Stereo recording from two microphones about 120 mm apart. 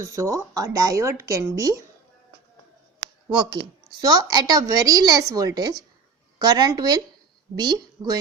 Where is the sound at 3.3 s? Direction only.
40° right (ahead or behind).